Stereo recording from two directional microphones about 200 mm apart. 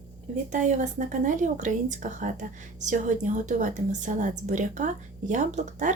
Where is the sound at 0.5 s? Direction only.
40° right (ahead or behind).